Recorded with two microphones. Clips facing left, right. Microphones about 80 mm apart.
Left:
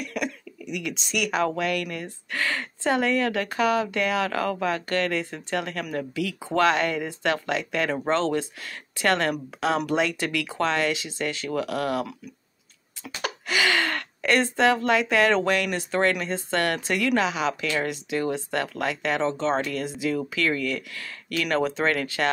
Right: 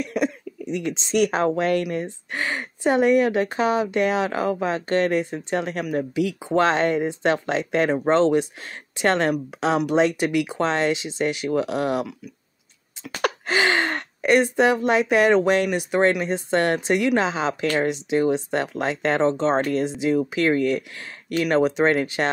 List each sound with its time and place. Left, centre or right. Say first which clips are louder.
0.0 s a sound: right 6 dB; right
0.7 s speech: right 5 dB; right
13.5 s speech: right 1 dB; right